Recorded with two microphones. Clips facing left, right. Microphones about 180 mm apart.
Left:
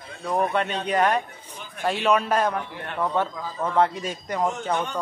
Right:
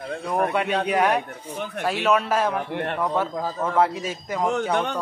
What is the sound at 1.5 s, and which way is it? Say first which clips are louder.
Speech: right 12 dB; 65° right (ahead or behind).